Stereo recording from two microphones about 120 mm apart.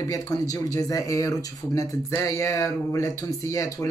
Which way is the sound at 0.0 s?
30° left (ahead or behind).